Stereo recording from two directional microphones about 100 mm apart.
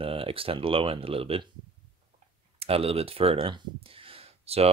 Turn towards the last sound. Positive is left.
turn(degrees=-80)